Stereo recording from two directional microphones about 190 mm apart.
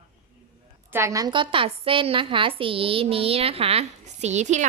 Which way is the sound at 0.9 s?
15° right (ahead or behind).